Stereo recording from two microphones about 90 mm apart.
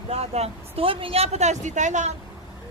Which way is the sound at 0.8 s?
85° right.